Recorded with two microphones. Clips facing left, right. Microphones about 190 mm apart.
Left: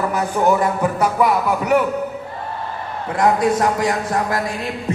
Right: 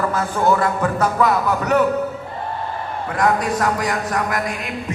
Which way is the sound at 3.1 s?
25° left (ahead or behind).